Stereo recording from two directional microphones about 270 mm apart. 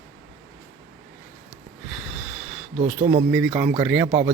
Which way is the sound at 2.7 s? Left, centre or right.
Right.